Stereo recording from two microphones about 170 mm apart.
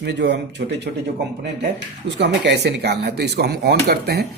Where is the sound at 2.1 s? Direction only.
90° right.